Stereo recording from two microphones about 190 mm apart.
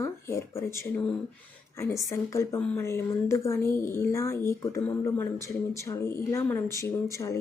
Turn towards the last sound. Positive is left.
turn(degrees=15)  # may be behind; listen again after turning